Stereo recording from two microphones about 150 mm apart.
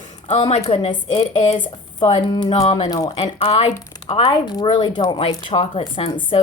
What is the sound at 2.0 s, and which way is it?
A woman's voice, 30° left (ahead or behind).